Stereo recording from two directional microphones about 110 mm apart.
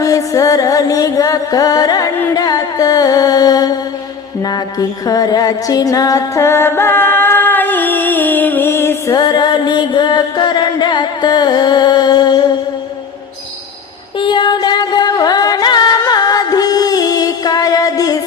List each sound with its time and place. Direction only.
0.0 s music: 30° left (ahead or behind)
9.1 s music: 40° left (ahead or behind)
14.2 s music: 45° left (ahead or behind)